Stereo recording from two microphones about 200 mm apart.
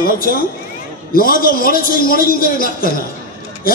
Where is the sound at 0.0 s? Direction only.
45° left (ahead or behind).